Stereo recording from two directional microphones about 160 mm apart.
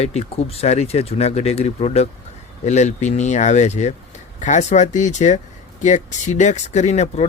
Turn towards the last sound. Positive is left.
turn(degrees=45)  # may be behind; listen again after turning